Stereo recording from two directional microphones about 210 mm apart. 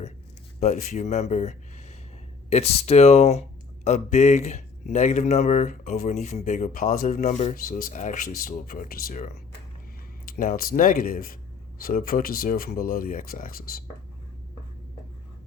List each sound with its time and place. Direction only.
0.6 s speech: 35° left (ahead or behind)